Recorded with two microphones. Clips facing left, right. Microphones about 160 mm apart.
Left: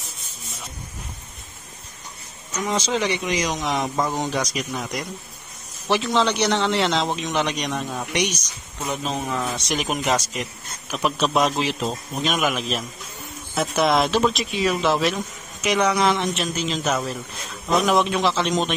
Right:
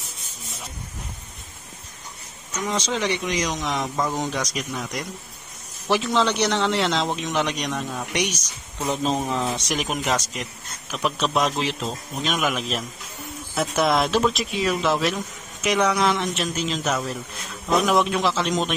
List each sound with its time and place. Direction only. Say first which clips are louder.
2.7 s a man's voice: left 2 dB; 5° left (ahead or behind)
9.3 s speech: right 1 dB; 20° right (ahead or behind)
9.7 s a man's voice: left 2 dB; centre (ahead or behind)